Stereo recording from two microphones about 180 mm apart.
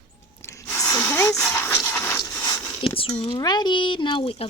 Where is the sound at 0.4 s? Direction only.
15° left (ahead or behind).